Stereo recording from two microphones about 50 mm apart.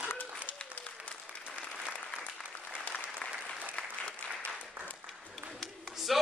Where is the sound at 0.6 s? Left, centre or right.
Left.